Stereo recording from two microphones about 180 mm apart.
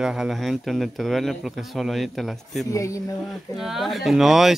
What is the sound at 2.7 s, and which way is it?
Speech, 20° left (ahead or behind).